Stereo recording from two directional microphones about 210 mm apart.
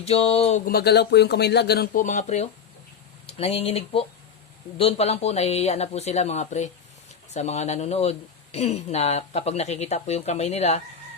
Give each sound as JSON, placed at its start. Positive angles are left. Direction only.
{"t": 0.0, "sound": "speech", "side_deg": 30}